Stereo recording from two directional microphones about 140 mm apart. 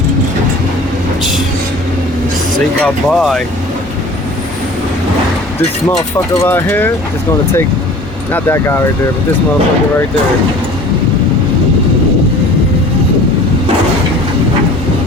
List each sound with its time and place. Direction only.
2.8 s speech: centre (ahead or behind)
6.1 s speech: 20° left (ahead or behind)
8.3 s speech: 20° left (ahead or behind)